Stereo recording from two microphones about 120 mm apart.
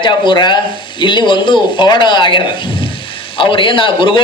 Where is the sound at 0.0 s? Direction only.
40° left (ahead or behind).